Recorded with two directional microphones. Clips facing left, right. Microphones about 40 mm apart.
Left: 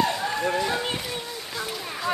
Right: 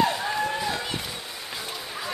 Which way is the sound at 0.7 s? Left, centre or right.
Left.